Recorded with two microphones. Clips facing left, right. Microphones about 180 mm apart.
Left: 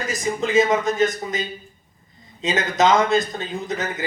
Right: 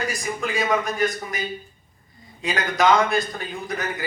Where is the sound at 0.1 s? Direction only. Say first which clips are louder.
Left 6 dB; 20° left (ahead or behind).